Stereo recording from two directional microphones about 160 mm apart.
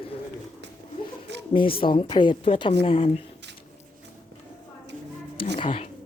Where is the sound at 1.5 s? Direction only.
35° left (ahead or behind).